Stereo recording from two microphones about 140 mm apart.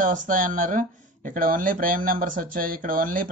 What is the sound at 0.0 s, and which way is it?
Speech, 70° right (ahead or behind).